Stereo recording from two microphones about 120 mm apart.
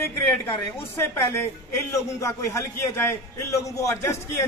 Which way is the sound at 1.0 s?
20° left (ahead or behind).